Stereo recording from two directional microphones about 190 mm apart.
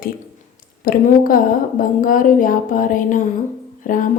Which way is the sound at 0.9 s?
45° left (ahead or behind).